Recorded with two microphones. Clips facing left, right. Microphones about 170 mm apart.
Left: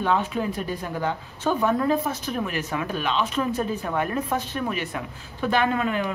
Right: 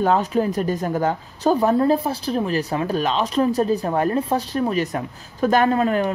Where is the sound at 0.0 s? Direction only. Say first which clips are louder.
Right 5 dB; 40° right (ahead or behind).